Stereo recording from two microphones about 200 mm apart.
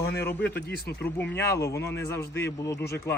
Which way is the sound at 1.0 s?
10° left (ahead or behind).